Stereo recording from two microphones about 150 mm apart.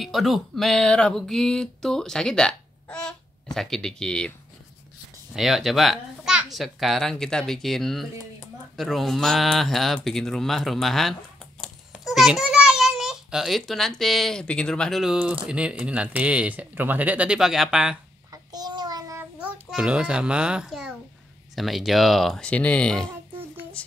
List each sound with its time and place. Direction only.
0.0 s a child's voice: centre (ahead or behind)
5.3 s a child's voice: centre (ahead or behind)
18.3 s child singing: 25° right (ahead or behind)
19.4 s a child's voice: 5° right (ahead or behind)